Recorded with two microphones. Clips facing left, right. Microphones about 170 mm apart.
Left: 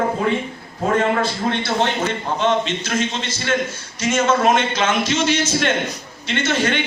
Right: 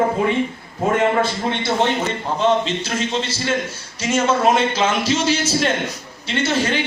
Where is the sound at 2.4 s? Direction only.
35° right (ahead or behind).